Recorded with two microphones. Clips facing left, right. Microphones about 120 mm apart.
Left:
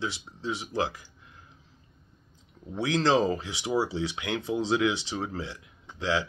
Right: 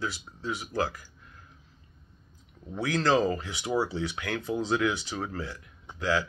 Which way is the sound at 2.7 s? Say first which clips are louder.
Left 1 dB; 25° left (ahead or behind).